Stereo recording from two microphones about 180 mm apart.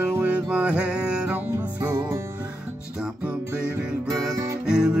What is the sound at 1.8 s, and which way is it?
Music, 20° right (ahead or behind).